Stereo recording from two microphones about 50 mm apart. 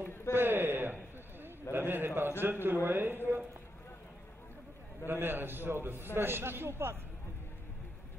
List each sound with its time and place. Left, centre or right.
0.3 s a sound: right
2.4 s a man's voice: right
5.0 s a man's voice: right